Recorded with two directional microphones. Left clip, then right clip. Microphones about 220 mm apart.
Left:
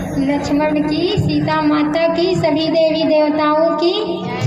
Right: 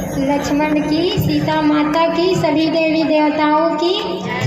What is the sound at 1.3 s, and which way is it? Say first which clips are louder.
Music: even; 30° left (ahead or behind).